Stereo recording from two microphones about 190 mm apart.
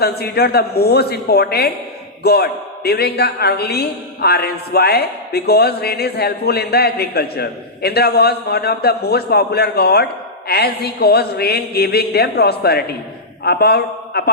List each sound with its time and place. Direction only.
0.0 s a man's voice: 55° left (ahead or behind)